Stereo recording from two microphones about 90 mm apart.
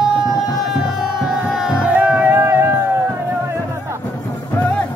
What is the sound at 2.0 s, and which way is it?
Music, 15° right (ahead or behind).